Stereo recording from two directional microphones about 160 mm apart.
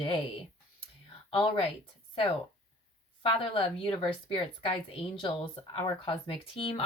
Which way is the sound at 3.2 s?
35° left (ahead or behind).